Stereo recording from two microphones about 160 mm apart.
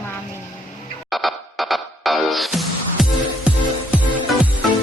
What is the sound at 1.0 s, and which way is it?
Music, centre (ahead or behind).